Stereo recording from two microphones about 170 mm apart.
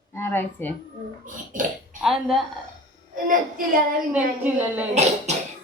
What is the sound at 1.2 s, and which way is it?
Speech, 50° right (ahead or behind).